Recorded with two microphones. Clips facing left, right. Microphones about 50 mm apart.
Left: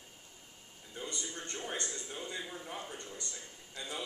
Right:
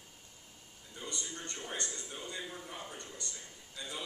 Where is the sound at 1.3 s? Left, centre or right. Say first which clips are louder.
Left 2 dB; left.